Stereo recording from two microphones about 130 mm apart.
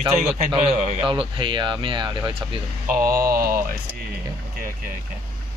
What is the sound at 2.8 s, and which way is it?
Speech, 90° right.